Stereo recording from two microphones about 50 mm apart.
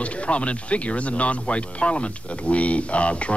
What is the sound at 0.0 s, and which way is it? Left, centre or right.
Speech, left.